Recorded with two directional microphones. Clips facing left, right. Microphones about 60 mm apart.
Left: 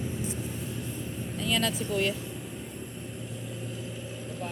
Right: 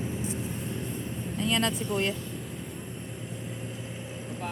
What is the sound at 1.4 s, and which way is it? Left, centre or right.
Speech, right.